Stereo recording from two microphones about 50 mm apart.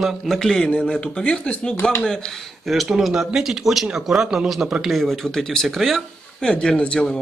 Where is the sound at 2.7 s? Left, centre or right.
Centre.